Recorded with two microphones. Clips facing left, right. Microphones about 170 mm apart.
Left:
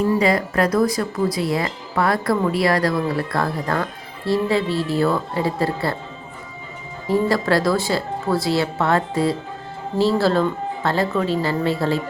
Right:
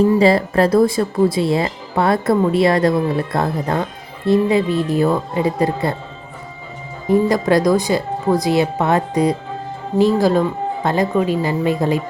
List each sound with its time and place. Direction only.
0.2 s speech: 30° right (ahead or behind)
7.1 s speech: 20° right (ahead or behind)